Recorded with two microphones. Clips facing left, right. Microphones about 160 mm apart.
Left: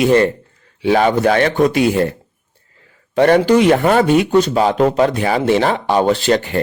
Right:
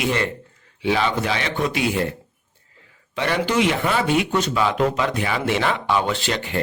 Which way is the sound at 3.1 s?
45° left (ahead or behind).